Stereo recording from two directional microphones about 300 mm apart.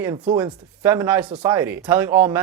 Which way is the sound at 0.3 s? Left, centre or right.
Centre.